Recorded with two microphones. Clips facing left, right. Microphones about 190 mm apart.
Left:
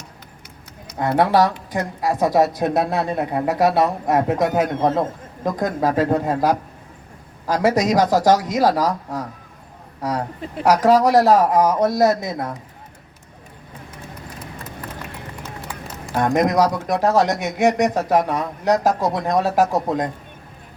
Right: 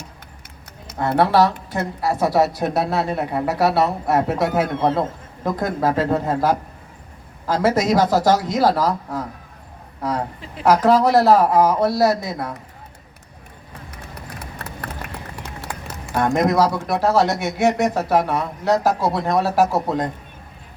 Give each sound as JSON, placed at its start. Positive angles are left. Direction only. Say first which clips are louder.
{"t": 0.9, "sound": "a woman's voice", "louder": "even", "side_deg": 15}
{"t": 10.6, "sound": "a woman's voice", "louder": "even", "side_deg": 15}
{"t": 14.3, "sound": "clip-clop", "louder": "right 2 dB", "side_deg": -70}
{"t": 16.2, "sound": "a woman's voice", "louder": "even", "side_deg": 15}